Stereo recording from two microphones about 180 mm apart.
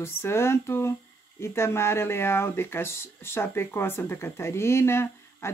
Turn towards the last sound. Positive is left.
turn(degrees=15)  # may be behind; listen again after turning